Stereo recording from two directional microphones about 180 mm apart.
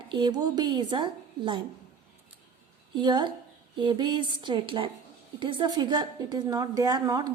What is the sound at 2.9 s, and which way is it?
A woman's voice, 25° right (ahead or behind).